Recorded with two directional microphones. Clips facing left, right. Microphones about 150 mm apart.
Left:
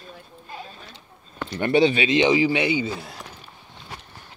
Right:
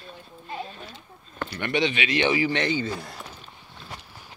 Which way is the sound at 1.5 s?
35° left (ahead or behind).